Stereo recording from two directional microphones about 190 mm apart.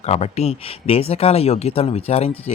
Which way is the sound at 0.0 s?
35° left (ahead or behind).